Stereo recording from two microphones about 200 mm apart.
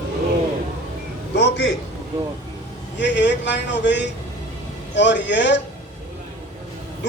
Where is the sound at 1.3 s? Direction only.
60° left (ahead or behind).